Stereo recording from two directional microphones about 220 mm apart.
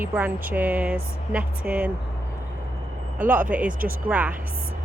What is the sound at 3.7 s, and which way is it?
Speech, 40° right (ahead or behind).